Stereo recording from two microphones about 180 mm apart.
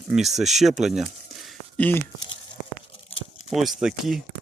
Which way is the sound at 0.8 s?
Centre (ahead or behind).